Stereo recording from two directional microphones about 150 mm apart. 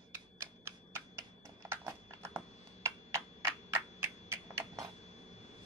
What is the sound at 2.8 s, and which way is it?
Typing, 20° right (ahead or behind).